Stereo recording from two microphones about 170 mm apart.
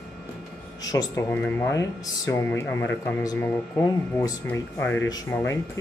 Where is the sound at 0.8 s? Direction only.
20° left (ahead or behind).